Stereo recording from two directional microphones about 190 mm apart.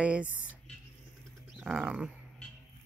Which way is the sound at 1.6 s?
5° right (ahead or behind).